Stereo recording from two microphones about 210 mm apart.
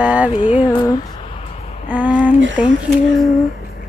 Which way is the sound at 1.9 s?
5° right (ahead or behind).